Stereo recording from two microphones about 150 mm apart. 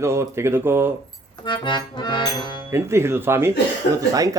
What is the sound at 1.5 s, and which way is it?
Accordion, 30° left (ahead or behind).